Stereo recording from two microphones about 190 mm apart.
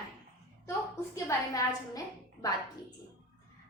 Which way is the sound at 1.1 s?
15° left (ahead or behind).